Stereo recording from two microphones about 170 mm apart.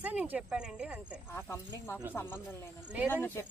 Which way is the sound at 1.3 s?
15° left (ahead or behind).